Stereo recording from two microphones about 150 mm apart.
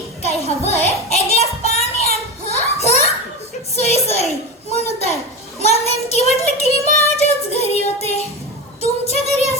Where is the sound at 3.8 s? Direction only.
45° left (ahead or behind).